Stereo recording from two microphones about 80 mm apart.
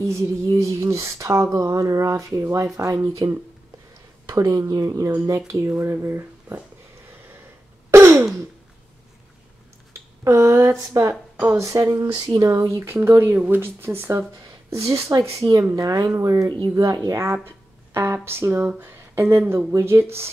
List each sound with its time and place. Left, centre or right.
0.0 s speech: right
7.9 s sigh: right
9.9 s speech: right
11.9 s speech: right
12.4 s speech: right
16.4 s speech: right
17.9 s speech: right